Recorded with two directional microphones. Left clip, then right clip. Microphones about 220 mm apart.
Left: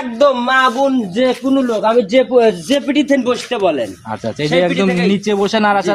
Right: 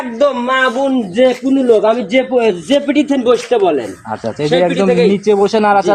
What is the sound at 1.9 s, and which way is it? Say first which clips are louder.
A man's voice: left 1 dB; 50° left (ahead or behind).